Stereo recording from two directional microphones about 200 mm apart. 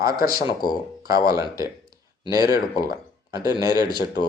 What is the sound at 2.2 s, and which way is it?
Speech, 20° right (ahead or behind).